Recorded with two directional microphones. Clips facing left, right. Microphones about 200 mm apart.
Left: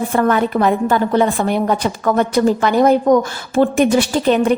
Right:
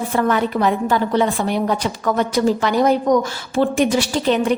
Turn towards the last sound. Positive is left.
turn(degrees=55)  # may be behind; listen again after turning